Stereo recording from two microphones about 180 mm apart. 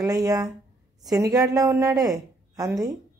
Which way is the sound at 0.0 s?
20° right (ahead or behind).